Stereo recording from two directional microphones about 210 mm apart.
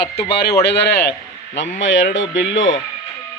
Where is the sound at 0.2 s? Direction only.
50° left (ahead or behind).